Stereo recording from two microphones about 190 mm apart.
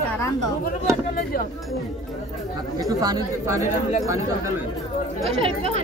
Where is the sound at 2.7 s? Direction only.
20° right (ahead or behind).